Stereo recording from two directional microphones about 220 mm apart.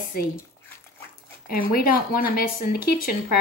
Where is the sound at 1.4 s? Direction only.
40° left (ahead or behind).